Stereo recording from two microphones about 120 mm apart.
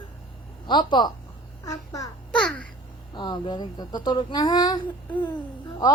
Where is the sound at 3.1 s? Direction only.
40° left (ahead or behind).